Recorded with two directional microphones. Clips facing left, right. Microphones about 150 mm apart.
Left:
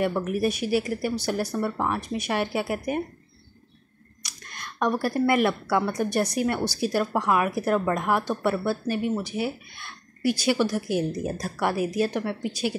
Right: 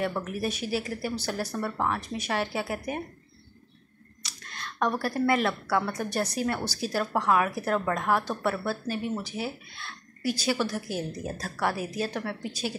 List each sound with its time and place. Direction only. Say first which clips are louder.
0.0 s speech: left 5 dB; 10° left (ahead or behind)
4.2 s speech: even; 15° left (ahead or behind)
8.8 s speech: left 5 dB; 55° left (ahead or behind)
9.1 s speech: left 5 dB; 10° left (ahead or behind)